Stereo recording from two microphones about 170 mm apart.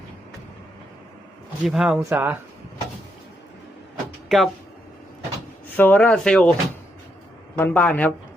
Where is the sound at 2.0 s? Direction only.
15° right (ahead or behind).